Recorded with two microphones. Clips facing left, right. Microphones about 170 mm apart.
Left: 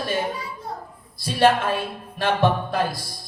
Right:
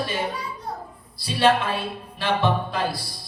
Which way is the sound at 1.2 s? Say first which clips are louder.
Left 2 dB; 50° left (ahead or behind).